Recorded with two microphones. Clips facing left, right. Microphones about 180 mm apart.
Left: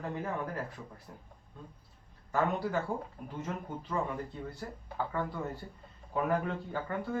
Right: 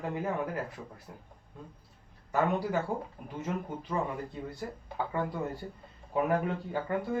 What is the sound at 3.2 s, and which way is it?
Speech, 10° right (ahead or behind).